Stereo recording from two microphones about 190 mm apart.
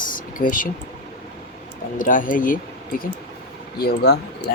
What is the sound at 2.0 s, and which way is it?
Speech, 45° left (ahead or behind).